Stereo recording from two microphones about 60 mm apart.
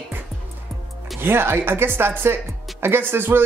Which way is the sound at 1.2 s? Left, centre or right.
Right.